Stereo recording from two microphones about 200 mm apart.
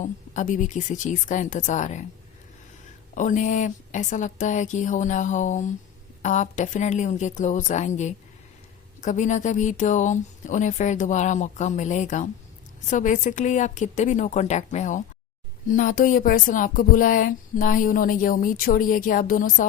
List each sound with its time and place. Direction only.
0.0 s speech: 40° left (ahead or behind)
3.2 s speech: 40° left (ahead or behind)